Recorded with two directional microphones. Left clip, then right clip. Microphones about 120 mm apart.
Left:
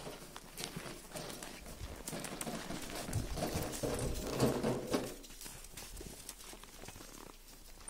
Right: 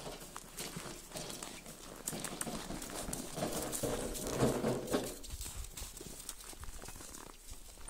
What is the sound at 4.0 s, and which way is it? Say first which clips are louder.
Horse: even; 25° left (ahead or behind).